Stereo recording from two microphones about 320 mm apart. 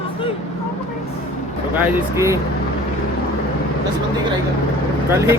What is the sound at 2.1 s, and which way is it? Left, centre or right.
Speech, centre.